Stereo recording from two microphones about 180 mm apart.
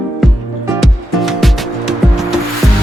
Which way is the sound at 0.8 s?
Centre (ahead or behind).